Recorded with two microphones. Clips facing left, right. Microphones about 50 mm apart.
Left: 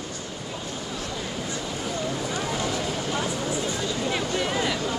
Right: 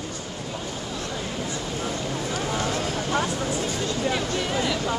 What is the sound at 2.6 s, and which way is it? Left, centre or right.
Vehicle, right.